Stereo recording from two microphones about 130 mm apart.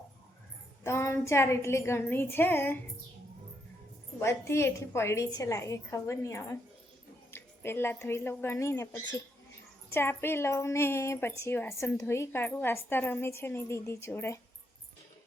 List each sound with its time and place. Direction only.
0.9 s a woman's voice: 20° left (ahead or behind)
4.2 s a woman's voice: 20° left (ahead or behind)